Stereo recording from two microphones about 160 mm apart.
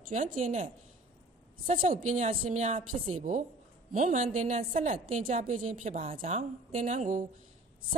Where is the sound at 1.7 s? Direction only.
55° right (ahead or behind).